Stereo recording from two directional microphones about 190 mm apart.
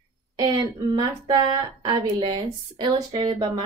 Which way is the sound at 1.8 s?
20° right (ahead or behind).